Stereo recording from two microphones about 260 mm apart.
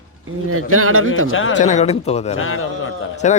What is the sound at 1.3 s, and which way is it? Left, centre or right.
Speech, left.